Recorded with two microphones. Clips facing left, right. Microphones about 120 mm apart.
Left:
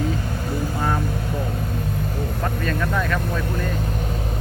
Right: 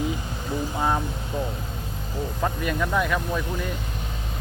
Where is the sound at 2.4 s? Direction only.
15° right (ahead or behind).